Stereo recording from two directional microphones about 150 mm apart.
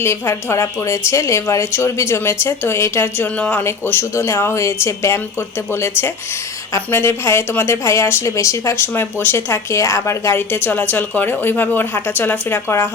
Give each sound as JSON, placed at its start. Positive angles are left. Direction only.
{"t": 0.0, "sound": "a woman's voice", "side_deg": 15}